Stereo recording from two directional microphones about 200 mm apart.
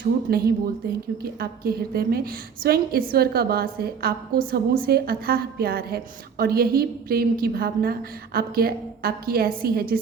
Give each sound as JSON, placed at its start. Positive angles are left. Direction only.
{"t": 0.0, "sound": "a woman's voice", "side_deg": -50}